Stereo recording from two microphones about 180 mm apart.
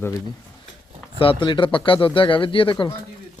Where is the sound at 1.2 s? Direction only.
30° left (ahead or behind).